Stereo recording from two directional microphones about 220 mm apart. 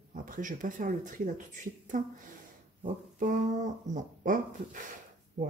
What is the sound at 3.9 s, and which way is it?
Speech, 35° right (ahead or behind).